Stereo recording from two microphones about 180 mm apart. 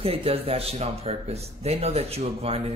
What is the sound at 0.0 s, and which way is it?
Speech, 35° right (ahead or behind).